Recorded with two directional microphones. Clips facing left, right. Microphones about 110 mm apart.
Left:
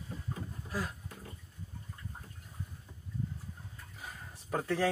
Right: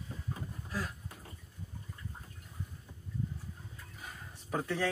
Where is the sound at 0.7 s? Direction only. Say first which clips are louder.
Left 1 dB; 5° left (ahead or behind).